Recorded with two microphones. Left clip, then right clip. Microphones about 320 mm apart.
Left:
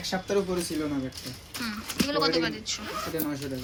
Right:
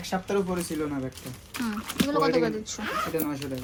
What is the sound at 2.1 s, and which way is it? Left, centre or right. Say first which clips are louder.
Speech: right 2 dB; centre.